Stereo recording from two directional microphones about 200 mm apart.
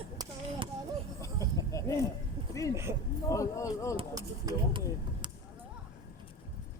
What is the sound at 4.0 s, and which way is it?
Speech, 20° right (ahead or behind).